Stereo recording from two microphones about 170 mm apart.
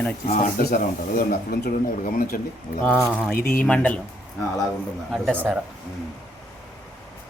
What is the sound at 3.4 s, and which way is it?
Speech, 55° left (ahead or behind).